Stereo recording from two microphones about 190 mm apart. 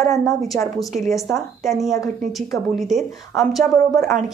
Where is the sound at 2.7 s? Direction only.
Centre (ahead or behind).